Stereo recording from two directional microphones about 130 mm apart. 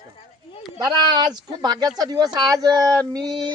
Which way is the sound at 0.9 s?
35° right (ahead or behind).